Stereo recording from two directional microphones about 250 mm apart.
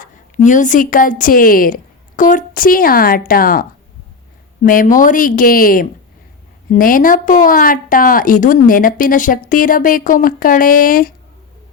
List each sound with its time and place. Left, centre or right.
0.0 s a woman's voice: left